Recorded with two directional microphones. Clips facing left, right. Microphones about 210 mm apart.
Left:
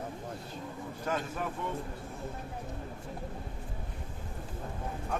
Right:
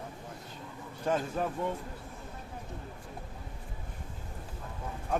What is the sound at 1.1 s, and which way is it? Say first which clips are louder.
Speech: right 4 dB; 30° right (ahead or behind).